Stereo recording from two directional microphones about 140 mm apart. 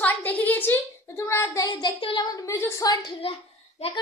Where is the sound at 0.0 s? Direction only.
15° left (ahead or behind).